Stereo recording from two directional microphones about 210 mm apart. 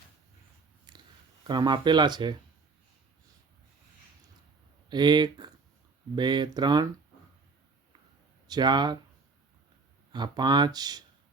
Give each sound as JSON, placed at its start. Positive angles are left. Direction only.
{"t": 0.9, "sound": "a sound", "side_deg": -20}
{"t": 1.5, "sound": "speech", "side_deg": -20}
{"t": 4.9, "sound": "speech", "side_deg": -20}
{"t": 8.4, "sound": "speech", "side_deg": -20}
{"t": 10.1, "sound": "speech", "side_deg": -20}